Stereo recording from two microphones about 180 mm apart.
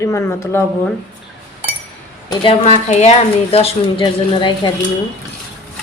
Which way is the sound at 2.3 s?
30° left (ahead or behind).